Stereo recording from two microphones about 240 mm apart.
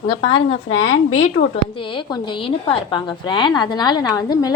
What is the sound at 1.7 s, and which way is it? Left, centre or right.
A woman's voice, left.